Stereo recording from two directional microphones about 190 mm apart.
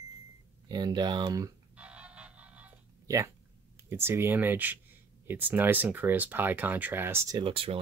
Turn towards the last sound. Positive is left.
turn(degrees=-25)  # may be behind; listen again after turning